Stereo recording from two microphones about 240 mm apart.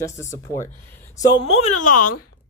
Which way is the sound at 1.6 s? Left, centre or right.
Left.